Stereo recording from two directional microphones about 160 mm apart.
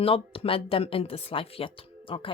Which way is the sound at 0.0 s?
35° left (ahead or behind).